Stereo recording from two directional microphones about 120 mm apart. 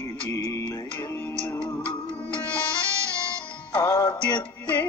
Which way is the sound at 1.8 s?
10° left (ahead or behind).